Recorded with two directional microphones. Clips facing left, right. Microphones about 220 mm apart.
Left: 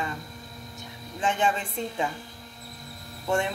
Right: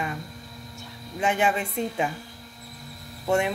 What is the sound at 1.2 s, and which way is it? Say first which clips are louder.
Speech: right 3 dB; 10° right (ahead or behind).